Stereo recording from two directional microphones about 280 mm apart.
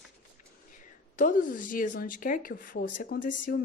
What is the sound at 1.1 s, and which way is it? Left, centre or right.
Speech, left.